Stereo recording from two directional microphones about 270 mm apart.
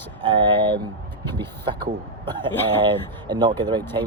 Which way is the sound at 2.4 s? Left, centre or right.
Centre.